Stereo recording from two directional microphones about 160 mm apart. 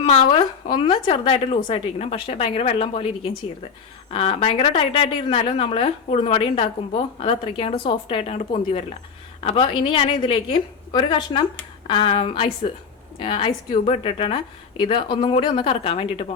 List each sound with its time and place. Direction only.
0.0 s a woman's voice: 35° left (ahead or behind)
4.1 s a woman's voice: 35° left (ahead or behind)